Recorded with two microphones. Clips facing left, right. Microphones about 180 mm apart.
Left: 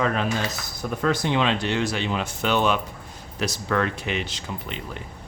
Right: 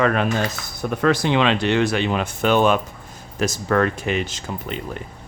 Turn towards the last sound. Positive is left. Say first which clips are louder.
# right 5 dB
turn(degrees=-45)  # may be behind; listen again after turning